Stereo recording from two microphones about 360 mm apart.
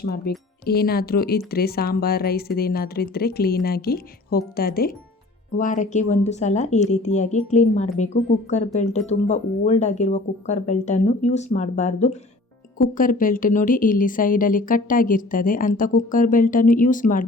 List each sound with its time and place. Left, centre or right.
0.0 s a woman's voice: left